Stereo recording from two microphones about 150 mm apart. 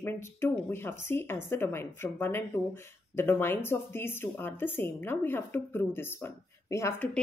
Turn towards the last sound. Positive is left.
turn(degrees=15)  # may be behind; listen again after turning